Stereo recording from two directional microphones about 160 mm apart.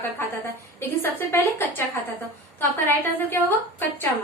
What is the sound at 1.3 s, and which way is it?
A woman's voice, 15° left (ahead or behind).